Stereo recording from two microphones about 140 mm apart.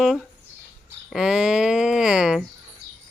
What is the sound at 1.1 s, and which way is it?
Speech, 5° right (ahead or behind).